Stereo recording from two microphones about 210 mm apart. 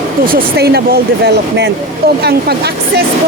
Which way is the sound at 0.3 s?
45° right (ahead or behind).